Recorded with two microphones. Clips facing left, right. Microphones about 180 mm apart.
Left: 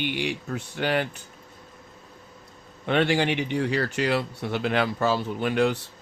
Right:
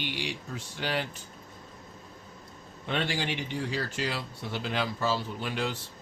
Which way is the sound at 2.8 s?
65° left (ahead or behind).